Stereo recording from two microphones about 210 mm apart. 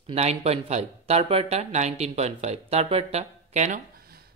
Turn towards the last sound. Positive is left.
turn(degrees=-35)  # may be behind; listen again after turning